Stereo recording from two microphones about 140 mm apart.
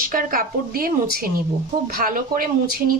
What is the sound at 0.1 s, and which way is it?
A woman's voice, 90° right.